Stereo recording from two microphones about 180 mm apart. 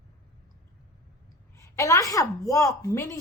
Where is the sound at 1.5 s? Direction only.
15° left (ahead or behind).